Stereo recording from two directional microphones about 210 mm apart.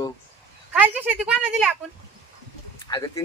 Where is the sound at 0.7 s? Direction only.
5° right (ahead or behind).